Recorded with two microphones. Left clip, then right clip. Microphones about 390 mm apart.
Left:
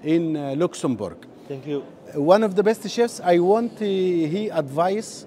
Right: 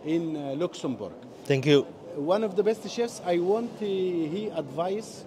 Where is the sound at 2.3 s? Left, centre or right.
Left.